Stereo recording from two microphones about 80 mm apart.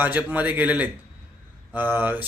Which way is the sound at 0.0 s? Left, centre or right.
Right.